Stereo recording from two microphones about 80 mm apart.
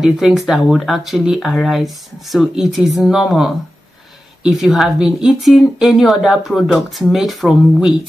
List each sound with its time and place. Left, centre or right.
0.0 s speech: centre